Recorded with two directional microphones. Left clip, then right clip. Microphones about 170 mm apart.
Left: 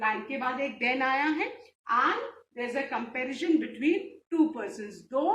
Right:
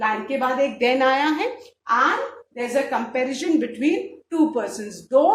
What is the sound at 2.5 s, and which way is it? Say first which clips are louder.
A woman's voice: right 9 dB; 30° right (ahead or behind).